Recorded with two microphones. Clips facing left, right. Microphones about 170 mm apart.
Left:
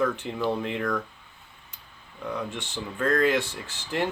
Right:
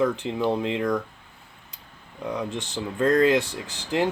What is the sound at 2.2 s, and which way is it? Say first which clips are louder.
Speech: right 3 dB; 15° right (ahead or behind).